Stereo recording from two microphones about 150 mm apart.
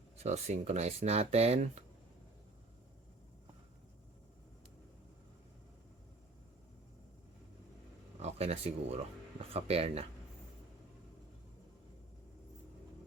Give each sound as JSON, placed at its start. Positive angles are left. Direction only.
{"t": 0.2, "sound": "speech", "side_deg": -50}
{"t": 8.2, "sound": "speech", "side_deg": -45}